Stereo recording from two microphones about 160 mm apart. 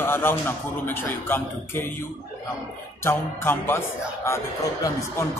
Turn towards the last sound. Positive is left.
turn(degrees=15)  # may be behind; listen again after turning